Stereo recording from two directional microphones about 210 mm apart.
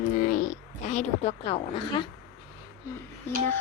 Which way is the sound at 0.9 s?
30° left (ahead or behind).